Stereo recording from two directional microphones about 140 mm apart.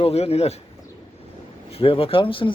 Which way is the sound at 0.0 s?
45° left (ahead or behind).